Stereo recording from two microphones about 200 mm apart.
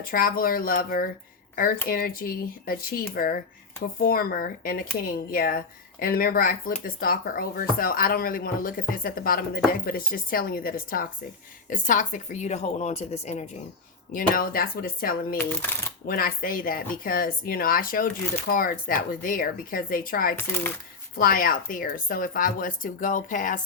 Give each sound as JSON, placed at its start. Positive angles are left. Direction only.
{"t": 0.0, "sound": "a woman's voice", "side_deg": 45}
{"t": 14.1, "sound": "speech", "side_deg": 45}